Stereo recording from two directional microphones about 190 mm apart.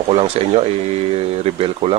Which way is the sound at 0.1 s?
30° right (ahead or behind).